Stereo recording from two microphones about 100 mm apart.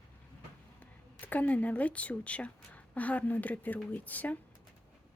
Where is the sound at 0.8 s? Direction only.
15° left (ahead or behind).